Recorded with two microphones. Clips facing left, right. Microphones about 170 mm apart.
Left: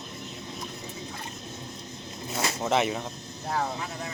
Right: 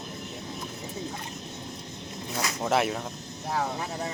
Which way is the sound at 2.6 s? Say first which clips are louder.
Even; 5° right (ahead or behind).